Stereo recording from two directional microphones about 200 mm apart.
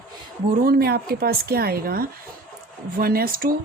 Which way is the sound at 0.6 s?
50° right (ahead or behind).